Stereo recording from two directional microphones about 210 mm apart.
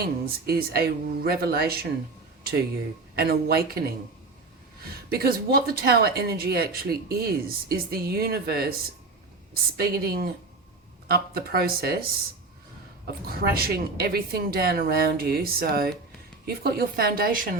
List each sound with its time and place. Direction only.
0.0 s speech: 45° right (ahead or behind)
3.2 s speech: 50° right (ahead or behind)
9.7 s speech: 45° right (ahead or behind)
13.1 s speech: 45° right (ahead or behind)